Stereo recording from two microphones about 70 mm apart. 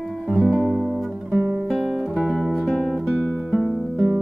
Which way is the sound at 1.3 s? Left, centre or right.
Centre.